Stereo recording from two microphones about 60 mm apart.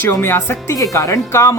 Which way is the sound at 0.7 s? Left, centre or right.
Left.